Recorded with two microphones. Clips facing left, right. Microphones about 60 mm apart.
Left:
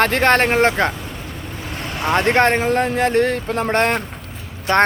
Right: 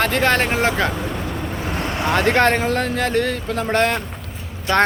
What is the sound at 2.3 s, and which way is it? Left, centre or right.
Speech, left.